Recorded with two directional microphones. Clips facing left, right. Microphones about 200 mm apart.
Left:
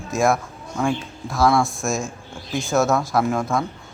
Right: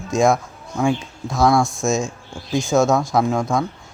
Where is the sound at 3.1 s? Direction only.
15° right (ahead or behind).